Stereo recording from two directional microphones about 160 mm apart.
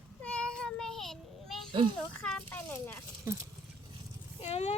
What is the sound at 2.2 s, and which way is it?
Speech, 10° left (ahead or behind).